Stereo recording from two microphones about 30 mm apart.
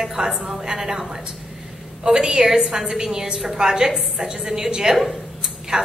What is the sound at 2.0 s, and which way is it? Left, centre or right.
A woman's voice, right.